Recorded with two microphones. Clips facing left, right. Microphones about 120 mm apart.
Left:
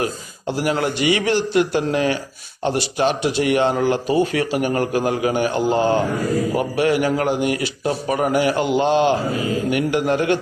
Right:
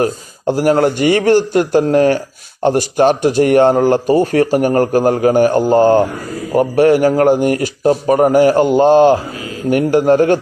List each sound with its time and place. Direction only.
0.0 s a man's voice: 45° right (ahead or behind)